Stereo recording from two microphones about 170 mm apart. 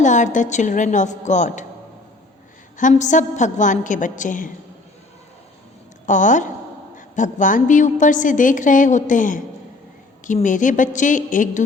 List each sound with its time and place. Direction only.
0.0 s a woman's voice: 45° left (ahead or behind)
2.7 s a woman's voice: 45° left (ahead or behind)
6.1 s a woman's voice: 45° left (ahead or behind)